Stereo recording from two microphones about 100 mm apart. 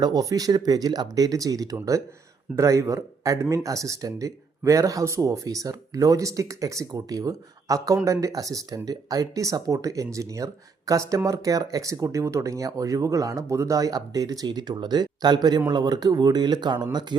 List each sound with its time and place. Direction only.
0.0 s speech: 40° right (ahead or behind)